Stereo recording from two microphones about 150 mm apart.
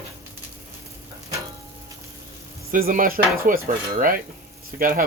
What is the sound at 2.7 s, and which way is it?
Dishes, 70° right (ahead or behind).